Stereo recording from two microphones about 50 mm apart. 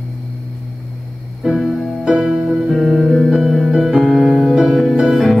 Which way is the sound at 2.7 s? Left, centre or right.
Centre.